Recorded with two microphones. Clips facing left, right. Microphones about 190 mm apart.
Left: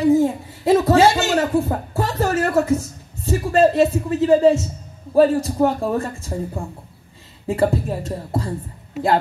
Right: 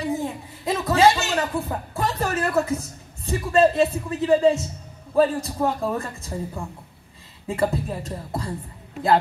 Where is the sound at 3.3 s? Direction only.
35° left (ahead or behind).